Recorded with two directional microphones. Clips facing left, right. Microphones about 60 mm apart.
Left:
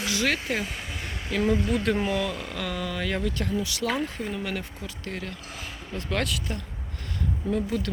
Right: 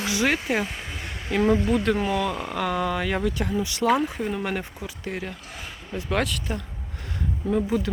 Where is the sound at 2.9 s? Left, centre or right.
Right.